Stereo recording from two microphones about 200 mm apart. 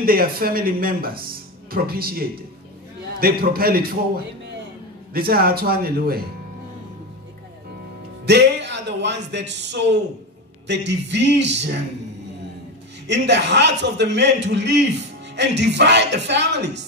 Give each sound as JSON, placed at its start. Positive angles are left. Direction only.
{"t": 0.0, "sound": "a man's voice", "side_deg": -50}
{"t": 8.3, "sound": "a man's voice", "side_deg": -60}
{"t": 13.0, "sound": "a man's voice", "side_deg": -60}